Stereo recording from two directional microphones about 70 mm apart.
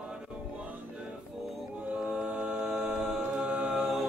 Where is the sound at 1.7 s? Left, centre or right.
Centre.